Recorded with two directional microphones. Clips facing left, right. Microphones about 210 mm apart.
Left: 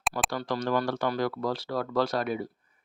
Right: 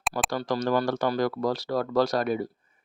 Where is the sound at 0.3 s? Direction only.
40° right (ahead or behind).